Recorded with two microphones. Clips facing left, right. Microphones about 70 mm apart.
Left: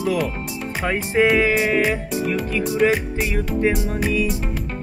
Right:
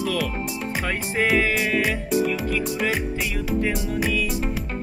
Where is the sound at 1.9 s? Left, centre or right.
Centre.